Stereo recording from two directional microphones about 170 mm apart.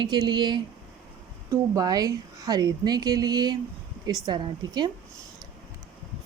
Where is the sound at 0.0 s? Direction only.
25° right (ahead or behind).